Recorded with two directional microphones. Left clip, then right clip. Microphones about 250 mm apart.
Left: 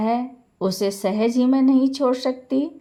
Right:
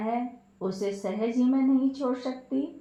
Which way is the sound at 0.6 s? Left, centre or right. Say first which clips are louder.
Left 8 dB; left.